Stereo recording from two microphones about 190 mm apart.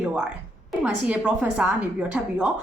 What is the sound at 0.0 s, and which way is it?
A woman's voice, 5° right (ahead or behind).